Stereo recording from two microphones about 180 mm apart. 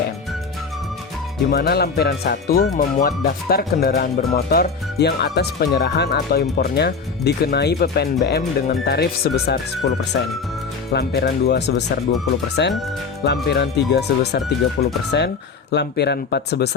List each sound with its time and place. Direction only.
1.5 s speech: 65° left (ahead or behind)